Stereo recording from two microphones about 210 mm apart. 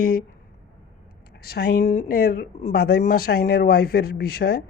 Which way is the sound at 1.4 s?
50° left (ahead or behind).